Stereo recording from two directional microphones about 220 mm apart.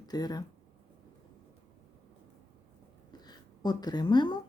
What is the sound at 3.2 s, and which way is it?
Speech, 20° left (ahead or behind).